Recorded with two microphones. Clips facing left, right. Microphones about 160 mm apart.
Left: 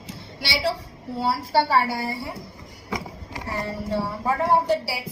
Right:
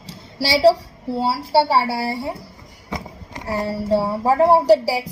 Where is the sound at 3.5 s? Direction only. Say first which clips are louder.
Right 8 dB; 35° right (ahead or behind).